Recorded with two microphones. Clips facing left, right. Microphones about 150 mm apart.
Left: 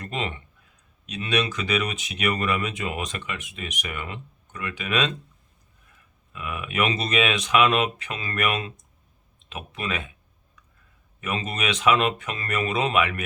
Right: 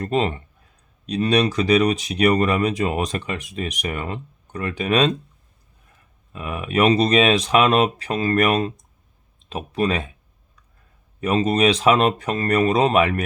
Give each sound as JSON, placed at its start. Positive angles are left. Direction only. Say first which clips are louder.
{"t": 0.0, "sound": "speech", "louder": "right 9 dB", "side_deg": -40}
{"t": 6.3, "sound": "speech", "louder": "right 6 dB", "side_deg": -35}
{"t": 11.2, "sound": "speech", "louder": "right 11 dB", "side_deg": -35}